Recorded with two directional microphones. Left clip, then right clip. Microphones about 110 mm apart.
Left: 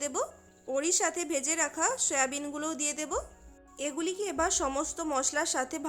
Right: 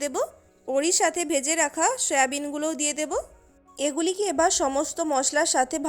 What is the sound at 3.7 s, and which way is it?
A woman's voice, 55° right (ahead or behind).